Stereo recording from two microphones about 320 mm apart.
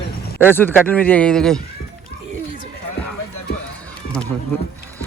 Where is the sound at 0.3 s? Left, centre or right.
Centre.